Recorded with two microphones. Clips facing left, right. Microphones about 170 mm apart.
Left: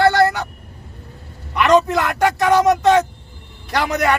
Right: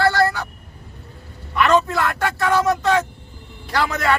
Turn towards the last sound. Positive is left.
turn(degrees=20)  # may be behind; listen again after turning